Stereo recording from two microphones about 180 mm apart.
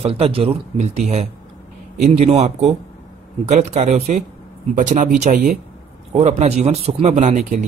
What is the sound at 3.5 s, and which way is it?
Speech, 40° right (ahead or behind).